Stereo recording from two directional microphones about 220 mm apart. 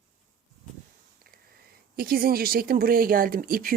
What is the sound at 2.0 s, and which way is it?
Speech, 40° right (ahead or behind).